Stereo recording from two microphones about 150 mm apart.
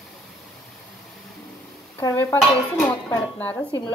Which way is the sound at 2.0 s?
20° left (ahead or behind).